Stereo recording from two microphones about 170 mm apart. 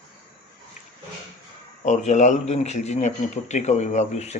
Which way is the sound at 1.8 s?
45° left (ahead or behind).